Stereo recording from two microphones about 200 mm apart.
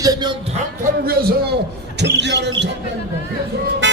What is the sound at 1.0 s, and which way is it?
A man's voice, 50° right (ahead or behind).